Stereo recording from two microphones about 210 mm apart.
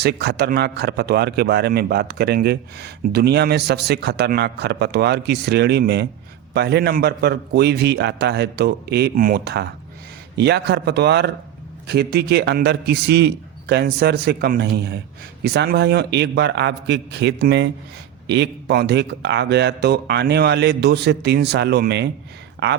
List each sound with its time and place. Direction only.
0.0 s a man's voice: 50° right (ahead or behind)